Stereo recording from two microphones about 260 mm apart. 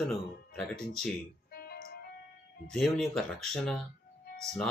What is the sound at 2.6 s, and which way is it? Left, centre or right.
Speech, centre.